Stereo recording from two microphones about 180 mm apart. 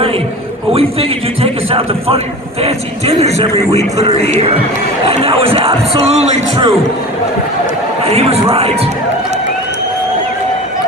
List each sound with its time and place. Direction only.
0.7 s a man's voice: 35° right (ahead or behind)
8.0 s a man's voice: 35° right (ahead or behind)